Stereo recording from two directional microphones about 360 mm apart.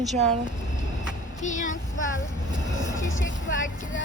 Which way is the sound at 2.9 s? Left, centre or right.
Left.